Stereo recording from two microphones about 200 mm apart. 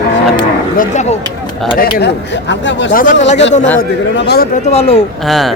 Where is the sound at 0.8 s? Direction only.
35° left (ahead or behind).